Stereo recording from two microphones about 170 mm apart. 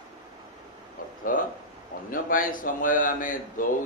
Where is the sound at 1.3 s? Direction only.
55° left (ahead or behind).